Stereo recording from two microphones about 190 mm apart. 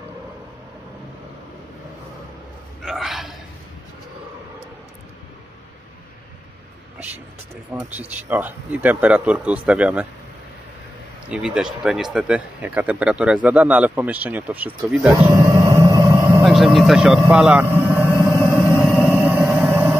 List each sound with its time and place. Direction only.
2.8 s speech: centre (ahead or behind)
7.7 s speech: 10° right (ahead or behind)
11.2 s speech: 5° right (ahead or behind)
15.5 s a sound: 15° right (ahead or behind)
16.4 s speech: centre (ahead or behind)
18.7 s vehicle: 5° right (ahead or behind)
19.0 s a sound: 10° right (ahead or behind)